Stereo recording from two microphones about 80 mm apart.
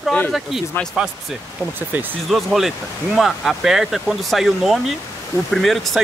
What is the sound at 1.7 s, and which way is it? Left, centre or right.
Speech, right.